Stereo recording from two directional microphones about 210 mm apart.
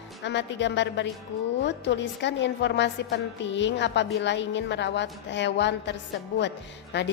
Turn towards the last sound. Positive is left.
turn(degrees=55)  # may be behind; listen again after turning